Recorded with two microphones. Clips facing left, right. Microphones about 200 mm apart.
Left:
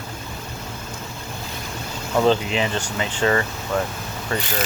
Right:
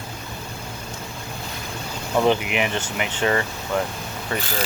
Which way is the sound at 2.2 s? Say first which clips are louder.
Left 2 dB; 15° right (ahead or behind).